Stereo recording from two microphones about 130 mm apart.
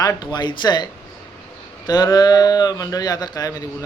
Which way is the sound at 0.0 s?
30° left (ahead or behind).